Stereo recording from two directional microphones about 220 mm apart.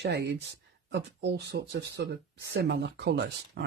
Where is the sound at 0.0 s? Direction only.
50° right (ahead or behind).